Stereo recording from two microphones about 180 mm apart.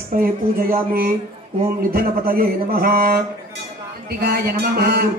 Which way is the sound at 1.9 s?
55° right (ahead or behind).